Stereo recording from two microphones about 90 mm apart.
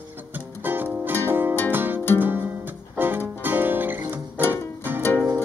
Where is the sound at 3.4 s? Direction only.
20° right (ahead or behind).